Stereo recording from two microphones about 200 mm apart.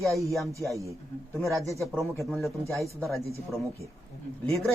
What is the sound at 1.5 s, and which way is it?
Speech, 15° right (ahead or behind).